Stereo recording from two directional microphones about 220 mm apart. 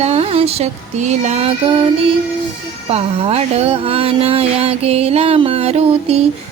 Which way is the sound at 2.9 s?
30° right (ahead or behind).